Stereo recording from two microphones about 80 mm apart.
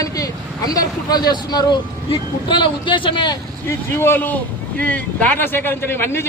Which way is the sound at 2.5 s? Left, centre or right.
Left.